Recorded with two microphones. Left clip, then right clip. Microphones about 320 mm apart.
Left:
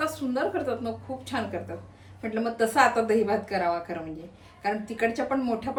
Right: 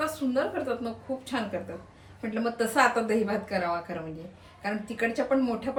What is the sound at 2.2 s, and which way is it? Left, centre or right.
Speech, centre.